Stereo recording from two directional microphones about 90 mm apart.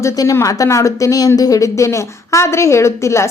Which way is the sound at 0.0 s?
35° left (ahead or behind).